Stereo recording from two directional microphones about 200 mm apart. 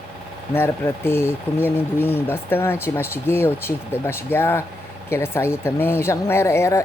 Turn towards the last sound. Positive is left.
turn(degrees=15)  # may be behind; listen again after turning